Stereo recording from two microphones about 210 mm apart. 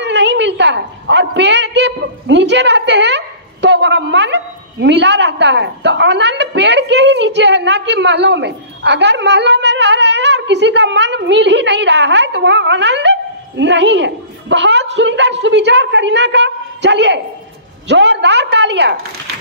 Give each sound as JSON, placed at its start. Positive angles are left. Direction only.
{"t": 0.0, "sound": "a woman's voice", "side_deg": -55}